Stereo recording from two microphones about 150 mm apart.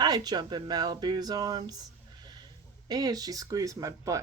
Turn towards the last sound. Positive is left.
turn(degrees=-20)  # may be behind; listen again after turning